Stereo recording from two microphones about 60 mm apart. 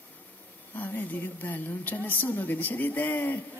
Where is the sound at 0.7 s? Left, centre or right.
Left.